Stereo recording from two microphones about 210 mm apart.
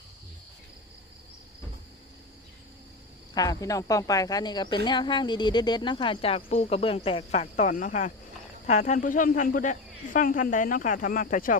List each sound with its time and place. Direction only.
3.3 s speech: 20° left (ahead or behind); by 11.5 s 40° left (ahead or behind)